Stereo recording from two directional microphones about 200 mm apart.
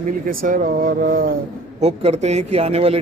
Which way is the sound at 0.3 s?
40° right (ahead or behind).